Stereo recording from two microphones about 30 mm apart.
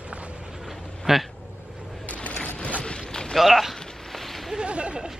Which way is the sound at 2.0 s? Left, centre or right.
Left.